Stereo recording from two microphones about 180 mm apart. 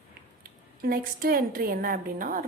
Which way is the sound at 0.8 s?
55° right (ahead or behind).